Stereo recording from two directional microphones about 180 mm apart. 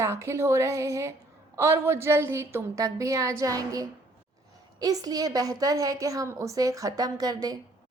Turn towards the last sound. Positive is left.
turn(degrees=-20)  # may be behind; listen again after turning